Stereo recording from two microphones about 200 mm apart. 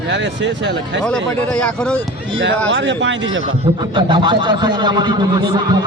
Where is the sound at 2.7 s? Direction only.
65° right (ahead or behind).